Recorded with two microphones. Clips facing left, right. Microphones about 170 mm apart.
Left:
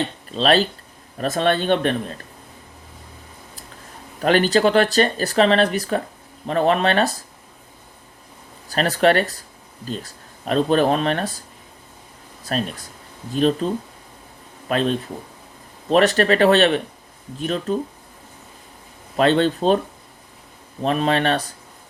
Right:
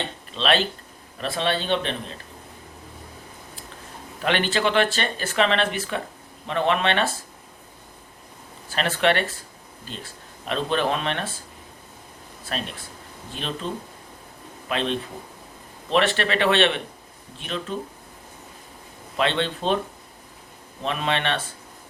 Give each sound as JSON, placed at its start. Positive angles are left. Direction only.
{"t": 0.3, "sound": "a man's voice", "side_deg": 40}
{"t": 4.2, "sound": "speech", "side_deg": 40}
{"t": 8.7, "sound": "speech", "side_deg": 40}
{"t": 12.5, "sound": "speech", "side_deg": 40}
{"t": 14.7, "sound": "a man's voice", "side_deg": 40}
{"t": 19.1, "sound": "speech", "side_deg": 40}
{"t": 20.8, "sound": "speech", "side_deg": 40}